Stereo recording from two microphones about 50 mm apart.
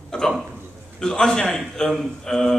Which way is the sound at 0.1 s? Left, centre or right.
Centre.